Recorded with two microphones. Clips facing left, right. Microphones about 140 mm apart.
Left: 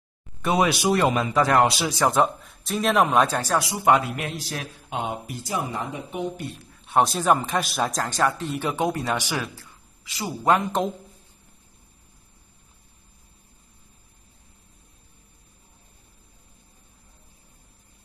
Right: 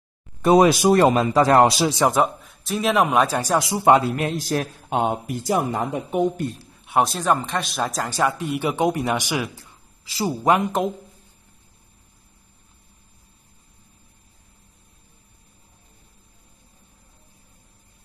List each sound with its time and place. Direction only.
0.4 s a man's voice: 40° right (ahead or behind)
2.0 s a man's voice: 10° right (ahead or behind)
3.6 s speech: 25° right (ahead or behind)
4.2 s speech: 45° right (ahead or behind)
7.0 s a man's voice: centre (ahead or behind); by 9.7 s 15° right (ahead or behind)
10.0 s speech: 30° right (ahead or behind)
10.4 s a man's voice: 10° right (ahead or behind)